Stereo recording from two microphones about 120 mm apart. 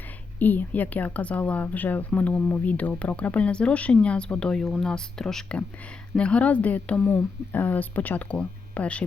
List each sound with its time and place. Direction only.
0.3 s a woman's voice: 15° left (ahead or behind)